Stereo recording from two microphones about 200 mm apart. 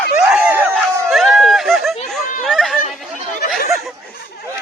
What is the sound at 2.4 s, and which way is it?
Chatter, centre (ahead or behind).